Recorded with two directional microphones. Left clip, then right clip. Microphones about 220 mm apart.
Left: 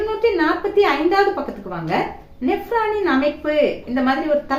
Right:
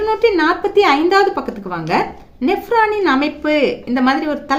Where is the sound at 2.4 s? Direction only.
50° right (ahead or behind).